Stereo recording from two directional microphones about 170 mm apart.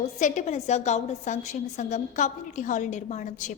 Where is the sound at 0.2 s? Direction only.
45° left (ahead or behind).